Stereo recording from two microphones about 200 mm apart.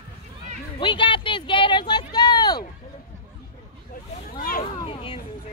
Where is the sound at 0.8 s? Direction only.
25° left (ahead or behind).